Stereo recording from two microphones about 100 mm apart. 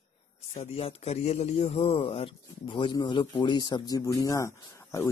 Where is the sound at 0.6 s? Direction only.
85° left.